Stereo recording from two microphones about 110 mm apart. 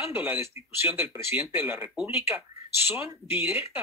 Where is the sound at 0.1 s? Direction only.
20° right (ahead or behind).